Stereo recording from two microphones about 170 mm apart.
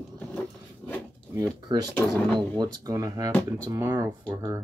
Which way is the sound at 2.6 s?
20° right (ahead or behind).